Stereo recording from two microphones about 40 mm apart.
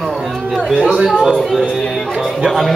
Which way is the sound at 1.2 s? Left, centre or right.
Centre.